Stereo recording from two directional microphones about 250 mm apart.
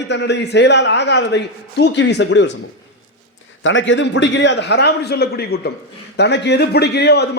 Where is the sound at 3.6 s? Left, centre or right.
Left.